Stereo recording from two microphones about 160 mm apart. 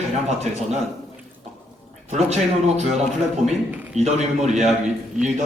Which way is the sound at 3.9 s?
45° right (ahead or behind).